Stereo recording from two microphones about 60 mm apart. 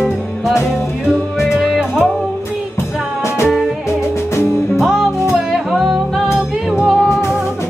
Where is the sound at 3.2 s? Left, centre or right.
Left.